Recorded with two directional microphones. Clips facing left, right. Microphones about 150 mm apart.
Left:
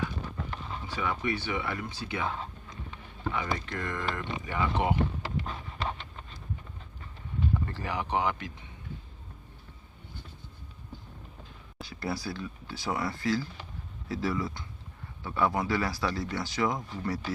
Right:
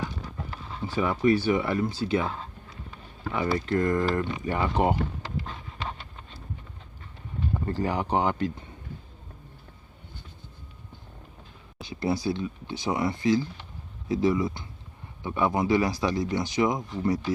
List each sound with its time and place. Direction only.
0.9 s speech: 35° right (ahead or behind)
2.9 s a sound: 30° right (ahead or behind)
3.7 s speech: 40° right (ahead or behind)
7.5 s speech: 30° right (ahead or behind)
11.8 s speech: 20° right (ahead or behind)